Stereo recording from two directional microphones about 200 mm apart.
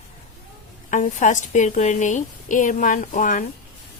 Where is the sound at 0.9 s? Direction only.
40° left (ahead or behind).